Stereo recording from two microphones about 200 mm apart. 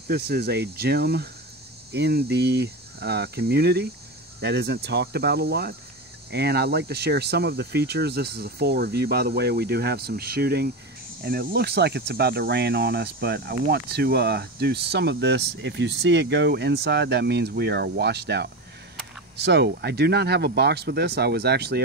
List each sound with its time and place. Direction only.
0.1 s speech: 55° right (ahead or behind)